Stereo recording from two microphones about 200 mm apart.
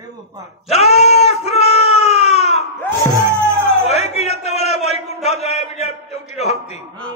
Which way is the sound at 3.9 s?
30° left (ahead or behind).